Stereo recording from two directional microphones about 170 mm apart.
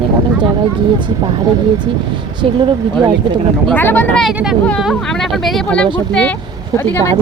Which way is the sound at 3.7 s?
10° left (ahead or behind).